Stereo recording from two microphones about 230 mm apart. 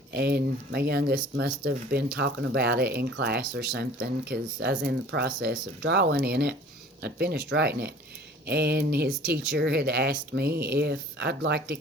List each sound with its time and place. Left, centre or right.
0.1 s speech: right